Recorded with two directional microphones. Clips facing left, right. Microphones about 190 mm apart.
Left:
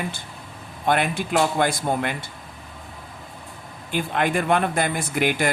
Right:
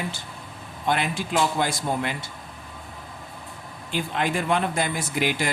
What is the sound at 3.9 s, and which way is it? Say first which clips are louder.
Speech: left 3 dB; 55° left (ahead or behind).